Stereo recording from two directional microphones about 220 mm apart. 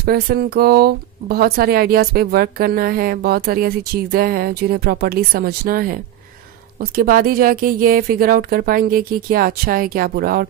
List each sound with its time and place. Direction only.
0.0 s speech: 45° right (ahead or behind)